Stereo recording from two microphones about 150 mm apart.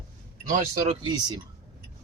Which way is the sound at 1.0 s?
30° right (ahead or behind).